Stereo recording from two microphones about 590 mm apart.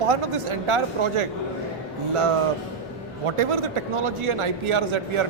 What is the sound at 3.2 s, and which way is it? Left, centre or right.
A man's voice, right.